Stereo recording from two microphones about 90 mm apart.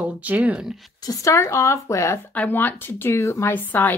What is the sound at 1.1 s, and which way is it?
Speech, 35° left (ahead or behind).